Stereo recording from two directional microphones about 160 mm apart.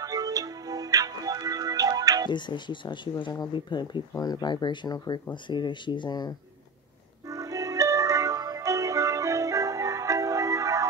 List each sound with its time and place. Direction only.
0.0 s music: 20° right (ahead or behind)
2.2 s speech: 30° left (ahead or behind)
7.2 s music: 20° right (ahead or behind)